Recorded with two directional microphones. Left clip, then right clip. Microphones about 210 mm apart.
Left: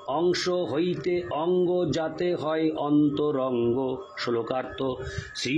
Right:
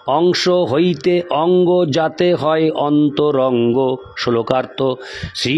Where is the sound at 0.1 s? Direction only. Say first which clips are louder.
Right 11 dB; 50° right (ahead or behind).